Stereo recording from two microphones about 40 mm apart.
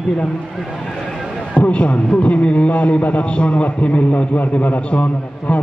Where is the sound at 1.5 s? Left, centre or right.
Left.